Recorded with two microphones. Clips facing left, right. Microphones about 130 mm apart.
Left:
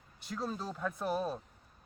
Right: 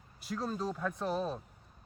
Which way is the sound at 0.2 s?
Centre (ahead or behind).